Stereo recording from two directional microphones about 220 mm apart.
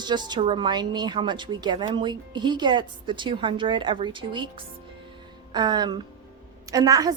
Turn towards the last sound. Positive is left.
turn(degrees=-15)  # may be behind; listen again after turning